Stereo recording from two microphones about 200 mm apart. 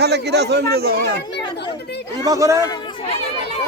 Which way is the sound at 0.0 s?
55° right (ahead or behind).